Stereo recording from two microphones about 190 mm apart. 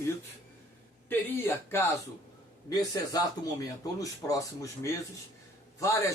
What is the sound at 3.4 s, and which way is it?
A man's voice, 20° left (ahead or behind).